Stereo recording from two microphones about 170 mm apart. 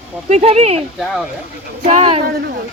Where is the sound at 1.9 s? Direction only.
40° right (ahead or behind).